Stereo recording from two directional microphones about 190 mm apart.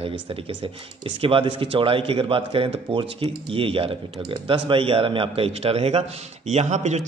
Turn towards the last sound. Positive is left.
turn(degrees=-40)  # may be behind; listen again after turning